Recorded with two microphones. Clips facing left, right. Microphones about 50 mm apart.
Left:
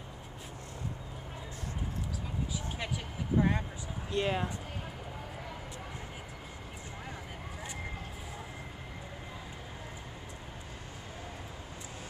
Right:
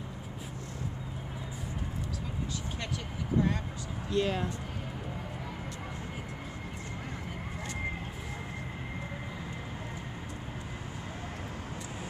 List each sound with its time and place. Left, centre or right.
3.3 s vehicle: centre
4.1 s speech: centre